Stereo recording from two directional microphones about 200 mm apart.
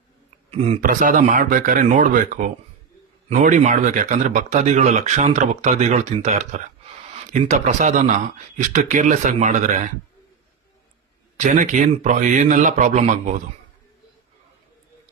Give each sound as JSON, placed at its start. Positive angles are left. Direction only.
{"t": 0.5, "sound": "speech", "side_deg": -30}
{"t": 11.3, "sound": "speech", "side_deg": -40}